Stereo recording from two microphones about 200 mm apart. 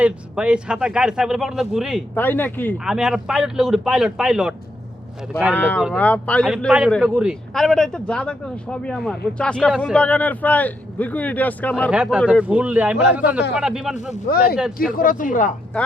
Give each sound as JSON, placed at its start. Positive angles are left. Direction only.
{"t": 0.0, "sound": "speech", "side_deg": -5}
{"t": 2.1, "sound": "speech", "side_deg": 10}
{"t": 2.7, "sound": "speech", "side_deg": -5}
{"t": 5.5, "sound": "speech", "side_deg": 10}
{"t": 11.9, "sound": "a man's voice", "side_deg": -5}
{"t": 14.3, "sound": "speech", "side_deg": 50}